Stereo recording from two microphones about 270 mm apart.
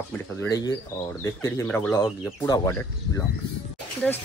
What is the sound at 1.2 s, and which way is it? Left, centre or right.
Speech, centre.